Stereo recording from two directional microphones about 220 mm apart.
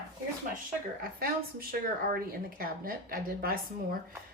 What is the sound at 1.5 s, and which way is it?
A woman's voice, 45° right (ahead or behind).